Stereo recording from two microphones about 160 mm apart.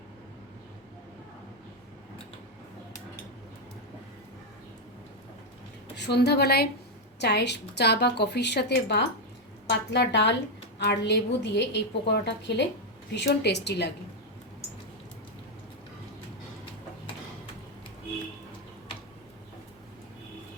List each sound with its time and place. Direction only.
6.0 s a woman's voice: 90° left